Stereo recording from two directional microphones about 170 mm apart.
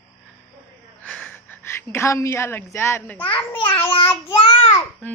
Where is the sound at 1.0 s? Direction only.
5° left (ahead or behind).